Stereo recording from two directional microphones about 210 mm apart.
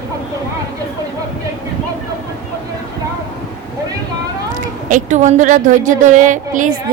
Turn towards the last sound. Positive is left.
turn(degrees=-40)  # may be behind; listen again after turning